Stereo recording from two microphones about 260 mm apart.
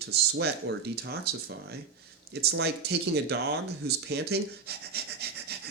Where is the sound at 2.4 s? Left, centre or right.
Right.